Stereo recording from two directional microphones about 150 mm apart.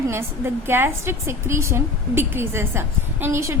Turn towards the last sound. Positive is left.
turn(degrees=-20)  # may be behind; listen again after turning